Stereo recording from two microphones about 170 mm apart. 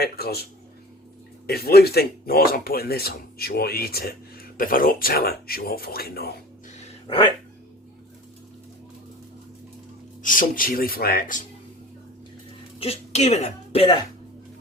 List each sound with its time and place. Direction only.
0.0 s speech: 65° left (ahead or behind)
1.5 s speech: 65° left (ahead or behind)
10.2 s speech: 55° left (ahead or behind)
12.8 s a woman's voice: 40° left (ahead or behind)